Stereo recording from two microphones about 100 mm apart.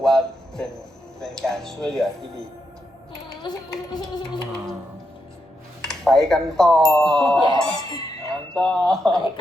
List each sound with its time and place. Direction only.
0.0 s a sound: 5° left (ahead or behind)
5.8 s speech: 5° left (ahead or behind)
7.3 s speech: 45° left (ahead or behind)
7.9 s dog: 40° left (ahead or behind)
8.5 s speech: 5° left (ahead or behind)
9.1 s speech: 45° left (ahead or behind)